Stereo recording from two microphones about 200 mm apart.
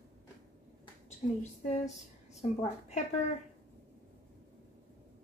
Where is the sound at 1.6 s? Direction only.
35° left (ahead or behind).